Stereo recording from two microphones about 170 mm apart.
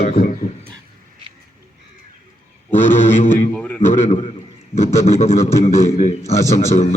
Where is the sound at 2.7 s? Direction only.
10° left (ahead or behind).